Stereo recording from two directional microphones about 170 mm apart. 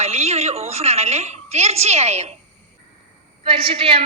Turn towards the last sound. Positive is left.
turn(degrees=-30)  # may be behind; listen again after turning